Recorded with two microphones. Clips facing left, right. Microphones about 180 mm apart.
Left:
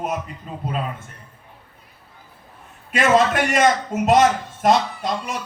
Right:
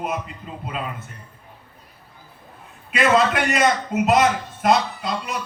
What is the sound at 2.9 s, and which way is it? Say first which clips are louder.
A man's voice: left 1 dB; 45° left (ahead or behind).